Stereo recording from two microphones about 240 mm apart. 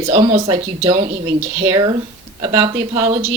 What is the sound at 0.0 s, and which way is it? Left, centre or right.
A woman's voice, right.